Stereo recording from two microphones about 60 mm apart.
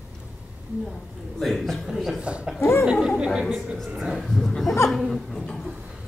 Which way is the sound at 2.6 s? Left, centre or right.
Left.